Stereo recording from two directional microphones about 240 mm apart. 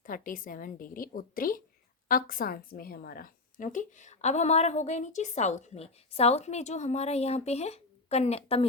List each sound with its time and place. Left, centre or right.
0.0 s a woman's voice: left